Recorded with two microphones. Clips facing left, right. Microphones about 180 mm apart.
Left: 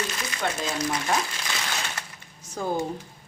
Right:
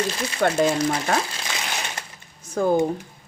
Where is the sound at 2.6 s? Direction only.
55° right (ahead or behind).